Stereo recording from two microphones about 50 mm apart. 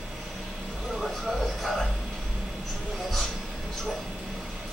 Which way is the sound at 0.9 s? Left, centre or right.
Centre.